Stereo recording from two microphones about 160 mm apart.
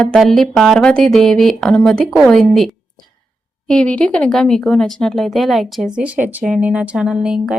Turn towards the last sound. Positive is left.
turn(degrees=-5)  # may be behind; listen again after turning